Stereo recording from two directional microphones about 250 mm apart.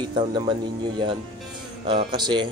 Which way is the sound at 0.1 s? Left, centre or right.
Centre.